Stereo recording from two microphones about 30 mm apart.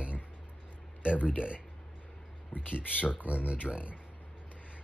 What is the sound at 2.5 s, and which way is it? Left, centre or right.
Speech, left.